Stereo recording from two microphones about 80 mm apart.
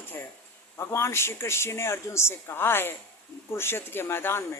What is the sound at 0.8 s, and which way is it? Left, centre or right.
Speech, left.